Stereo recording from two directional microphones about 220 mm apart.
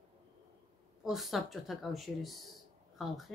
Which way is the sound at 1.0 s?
Centre (ahead or behind).